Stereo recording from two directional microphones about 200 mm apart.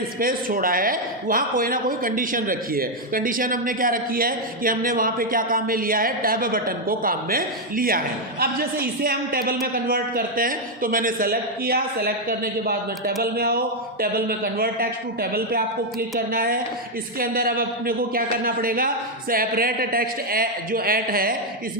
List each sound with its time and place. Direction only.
0.2 s speech: 45° right (ahead or behind)